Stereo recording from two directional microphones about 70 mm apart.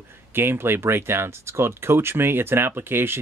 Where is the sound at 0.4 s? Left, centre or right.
Right.